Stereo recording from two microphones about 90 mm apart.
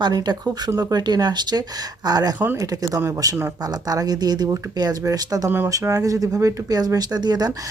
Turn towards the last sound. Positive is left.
turn(degrees=-50)  # may be behind; listen again after turning